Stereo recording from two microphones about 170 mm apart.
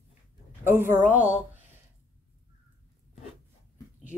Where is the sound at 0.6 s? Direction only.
10° right (ahead or behind).